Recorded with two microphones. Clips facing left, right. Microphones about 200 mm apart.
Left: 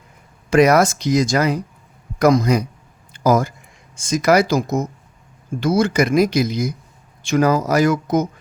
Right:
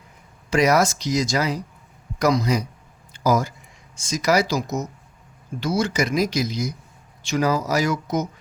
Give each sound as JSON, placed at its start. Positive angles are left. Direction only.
{"t": 0.5, "sound": "speech", "side_deg": 55}
{"t": 3.1, "sound": "a sound", "side_deg": 55}
{"t": 3.9, "sound": "speech", "side_deg": 55}